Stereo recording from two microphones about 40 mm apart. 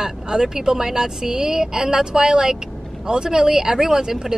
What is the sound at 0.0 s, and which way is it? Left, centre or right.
Speech, centre.